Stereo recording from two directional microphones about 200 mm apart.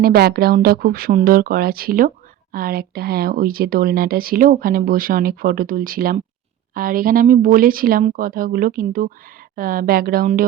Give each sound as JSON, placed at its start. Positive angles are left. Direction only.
{"t": 0.0, "sound": "speech", "side_deg": -50}